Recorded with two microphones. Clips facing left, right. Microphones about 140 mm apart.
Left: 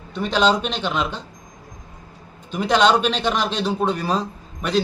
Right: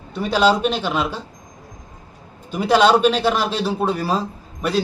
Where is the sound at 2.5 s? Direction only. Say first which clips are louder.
Right 2 dB; 5° right (ahead or behind).